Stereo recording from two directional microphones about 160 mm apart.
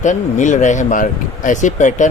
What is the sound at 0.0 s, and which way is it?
Speech, 50° left (ahead or behind).